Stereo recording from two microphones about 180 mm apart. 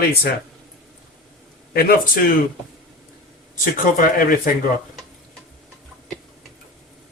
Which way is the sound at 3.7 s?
50° left (ahead or behind).